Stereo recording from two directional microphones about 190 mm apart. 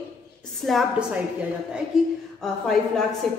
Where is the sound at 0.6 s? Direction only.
Centre (ahead or behind).